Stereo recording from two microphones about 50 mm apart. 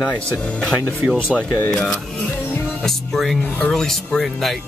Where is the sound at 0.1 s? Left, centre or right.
Left.